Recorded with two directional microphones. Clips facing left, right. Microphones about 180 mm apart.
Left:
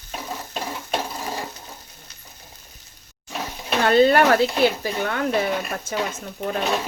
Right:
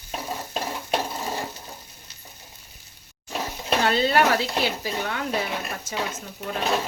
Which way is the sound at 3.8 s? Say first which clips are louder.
Left 6 dB; 50° left (ahead or behind).